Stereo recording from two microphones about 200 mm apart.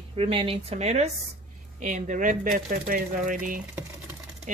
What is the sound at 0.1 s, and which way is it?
A woman's voice, 25° right (ahead or behind).